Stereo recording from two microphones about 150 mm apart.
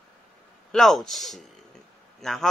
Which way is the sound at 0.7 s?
Centre (ahead or behind).